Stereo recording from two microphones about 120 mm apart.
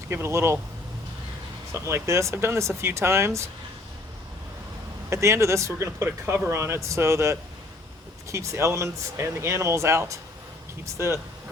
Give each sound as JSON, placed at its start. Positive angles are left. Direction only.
{"t": 0.1, "sound": "speech", "side_deg": -20}
{"t": 1.7, "sound": "speech", "side_deg": -20}
{"t": 5.0, "sound": "speech", "side_deg": -25}